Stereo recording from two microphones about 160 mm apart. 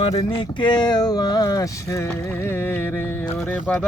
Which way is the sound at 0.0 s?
35° left (ahead or behind).